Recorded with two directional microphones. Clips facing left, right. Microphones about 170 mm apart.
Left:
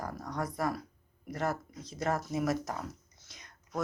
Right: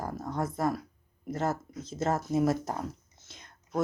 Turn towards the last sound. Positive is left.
turn(degrees=-25)  # may be behind; listen again after turning